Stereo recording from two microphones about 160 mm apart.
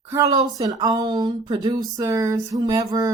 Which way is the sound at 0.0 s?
20° right (ahead or behind).